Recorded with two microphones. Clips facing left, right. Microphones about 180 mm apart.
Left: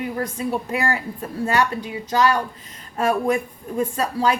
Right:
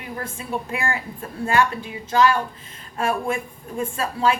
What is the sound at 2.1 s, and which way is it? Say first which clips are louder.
Speech: right 1 dB; 40° left (ahead or behind).